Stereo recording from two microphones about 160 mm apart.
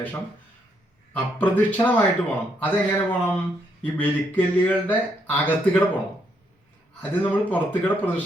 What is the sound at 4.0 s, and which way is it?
Speech, 10° left (ahead or behind).